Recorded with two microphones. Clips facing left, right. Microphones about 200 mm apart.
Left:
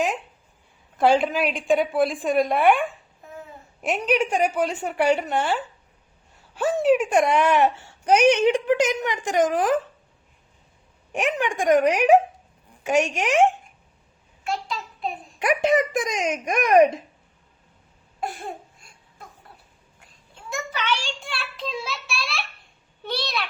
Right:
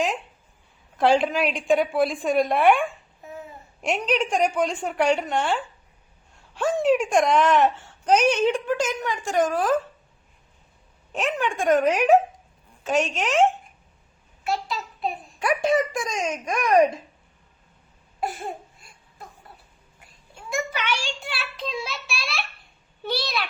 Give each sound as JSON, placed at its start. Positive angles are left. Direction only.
{"t": 0.9, "sound": "a woman's voice", "side_deg": 0}
{"t": 11.1, "sound": "speech", "side_deg": 15}
{"t": 14.4, "sound": "a sound", "side_deg": -5}
{"t": 15.4, "sound": "a child's voice", "side_deg": 20}
{"t": 20.3, "sound": "a child's voice", "side_deg": -10}